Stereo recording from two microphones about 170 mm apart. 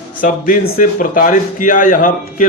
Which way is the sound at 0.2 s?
50° left (ahead or behind).